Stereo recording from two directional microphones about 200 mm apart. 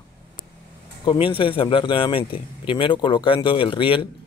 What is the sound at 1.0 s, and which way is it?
Speech, 25° left (ahead or behind).